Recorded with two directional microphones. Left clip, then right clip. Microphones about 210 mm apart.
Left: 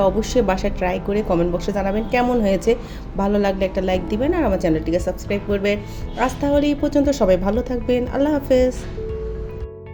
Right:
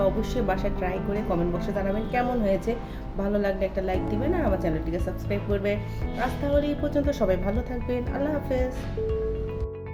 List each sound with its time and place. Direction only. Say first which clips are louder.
0.0 s a woman's voice: left 8 dB; 35° left (ahead or behind)